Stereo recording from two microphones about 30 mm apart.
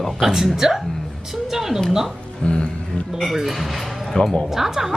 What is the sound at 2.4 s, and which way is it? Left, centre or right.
Speech, left.